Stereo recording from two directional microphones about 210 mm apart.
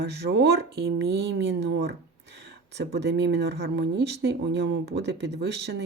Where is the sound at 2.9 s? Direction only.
55° right (ahead or behind).